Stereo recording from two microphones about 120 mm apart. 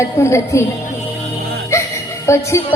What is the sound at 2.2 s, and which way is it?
Speech, 25° left (ahead or behind).